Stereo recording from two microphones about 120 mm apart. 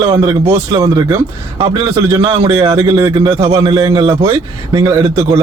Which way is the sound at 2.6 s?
30° right (ahead or behind).